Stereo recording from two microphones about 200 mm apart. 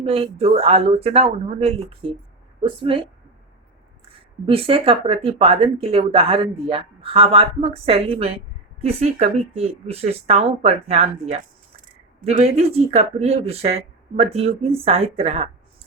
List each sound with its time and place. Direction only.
0.0 s speech: 30° right (ahead or behind)
4.4 s speech: 30° right (ahead or behind)